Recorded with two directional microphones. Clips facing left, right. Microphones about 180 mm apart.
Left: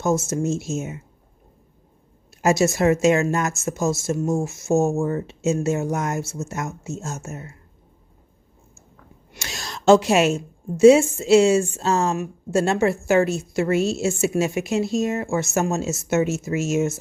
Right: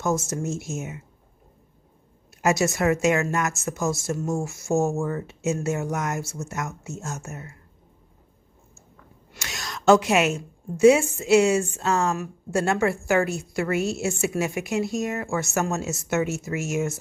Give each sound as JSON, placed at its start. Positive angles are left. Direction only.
{"t": 0.0, "sound": "a woman's voice", "side_deg": 25}
{"t": 2.4, "sound": "a woman's voice", "side_deg": 25}
{"t": 9.4, "sound": "a woman's voice", "side_deg": 30}